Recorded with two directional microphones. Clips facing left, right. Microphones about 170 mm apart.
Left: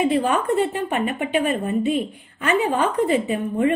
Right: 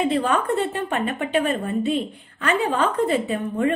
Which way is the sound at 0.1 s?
15° left (ahead or behind).